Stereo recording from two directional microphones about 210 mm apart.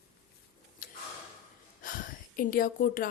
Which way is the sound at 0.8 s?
40° left (ahead or behind).